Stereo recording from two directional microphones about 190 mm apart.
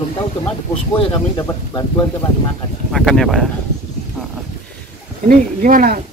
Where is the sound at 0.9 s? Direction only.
25° left (ahead or behind).